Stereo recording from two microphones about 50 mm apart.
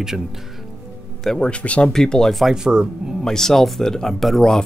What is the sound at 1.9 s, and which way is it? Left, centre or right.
Speech, centre.